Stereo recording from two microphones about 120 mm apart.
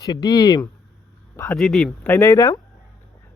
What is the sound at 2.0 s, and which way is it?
Speech, 20° left (ahead or behind).